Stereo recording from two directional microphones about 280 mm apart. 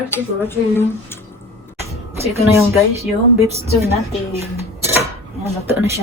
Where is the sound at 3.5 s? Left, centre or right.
Right.